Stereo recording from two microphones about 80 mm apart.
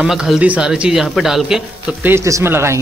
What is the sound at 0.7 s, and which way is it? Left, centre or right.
Speech, centre.